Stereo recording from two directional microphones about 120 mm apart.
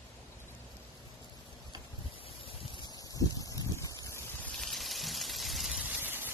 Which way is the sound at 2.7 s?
35° left (ahead or behind).